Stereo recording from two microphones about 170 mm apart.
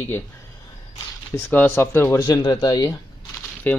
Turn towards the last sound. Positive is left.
turn(degrees=10)  # may be behind; listen again after turning